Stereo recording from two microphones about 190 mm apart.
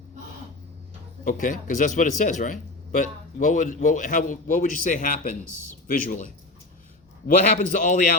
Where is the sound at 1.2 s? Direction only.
45° left (ahead or behind).